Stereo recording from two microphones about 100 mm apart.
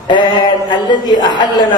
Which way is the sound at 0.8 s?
45° left (ahead or behind).